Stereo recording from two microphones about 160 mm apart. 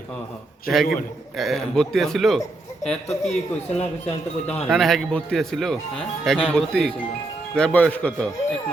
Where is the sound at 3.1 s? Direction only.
45° left (ahead or behind).